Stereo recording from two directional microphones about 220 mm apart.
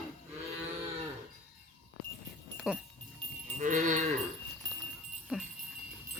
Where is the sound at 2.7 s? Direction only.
5° right (ahead or behind).